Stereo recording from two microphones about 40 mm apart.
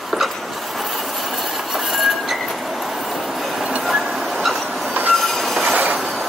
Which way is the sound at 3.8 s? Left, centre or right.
Centre.